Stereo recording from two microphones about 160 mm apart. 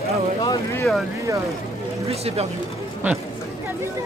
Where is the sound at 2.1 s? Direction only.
40° right (ahead or behind).